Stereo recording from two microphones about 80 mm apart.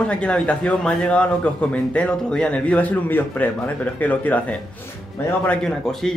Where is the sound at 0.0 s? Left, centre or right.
Centre.